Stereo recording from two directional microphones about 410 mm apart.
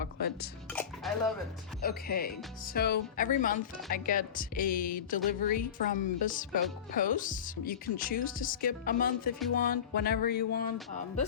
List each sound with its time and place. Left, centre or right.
0.0 s speech: left
0.7 s music: centre
1.8 s speech: left